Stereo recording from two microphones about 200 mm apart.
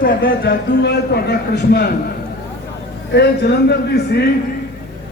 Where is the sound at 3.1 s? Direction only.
55° left (ahead or behind).